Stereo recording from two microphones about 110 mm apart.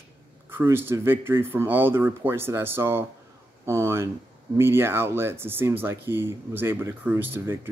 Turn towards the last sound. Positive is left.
turn(degrees=-20)  # may be behind; listen again after turning